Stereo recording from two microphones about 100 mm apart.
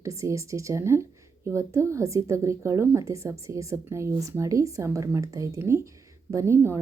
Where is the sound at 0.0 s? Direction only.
30° right (ahead or behind).